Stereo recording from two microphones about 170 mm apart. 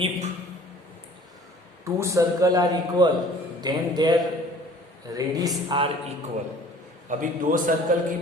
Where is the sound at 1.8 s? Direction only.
15° right (ahead or behind).